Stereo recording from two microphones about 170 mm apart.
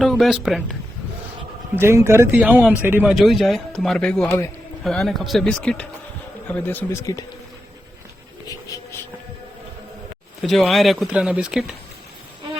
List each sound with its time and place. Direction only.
0.0 s speech: centre (ahead or behind)
1.7 s speech: 15° right (ahead or behind); by 4.2 s 5° left (ahead or behind)
4.2 s speech: 15° left (ahead or behind)
4.8 s speech: centre (ahead or behind); by 7.3 s 20° left (ahead or behind)
8.4 s a sound: 15° left (ahead or behind)
10.4 s speech: centre (ahead or behind)